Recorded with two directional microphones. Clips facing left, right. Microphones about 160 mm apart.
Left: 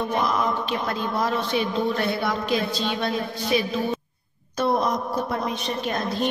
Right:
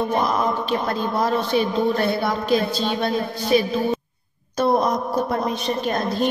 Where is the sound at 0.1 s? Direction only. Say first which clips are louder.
Right 2 dB; 35° right (ahead or behind).